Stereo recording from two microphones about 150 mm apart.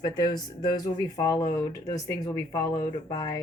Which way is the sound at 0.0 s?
30° left (ahead or behind).